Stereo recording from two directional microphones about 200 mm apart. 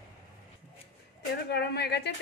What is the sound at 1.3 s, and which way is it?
Speech, 55° left (ahead or behind).